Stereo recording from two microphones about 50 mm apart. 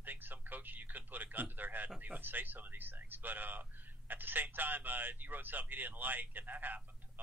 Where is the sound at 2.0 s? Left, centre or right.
Right.